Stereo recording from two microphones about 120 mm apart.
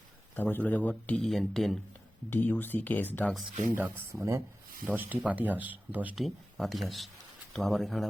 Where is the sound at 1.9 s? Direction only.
15° left (ahead or behind).